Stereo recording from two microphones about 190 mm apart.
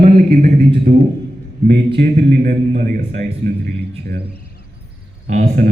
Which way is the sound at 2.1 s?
45° right (ahead or behind).